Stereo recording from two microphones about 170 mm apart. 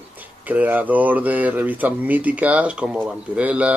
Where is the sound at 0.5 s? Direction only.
10° right (ahead or behind).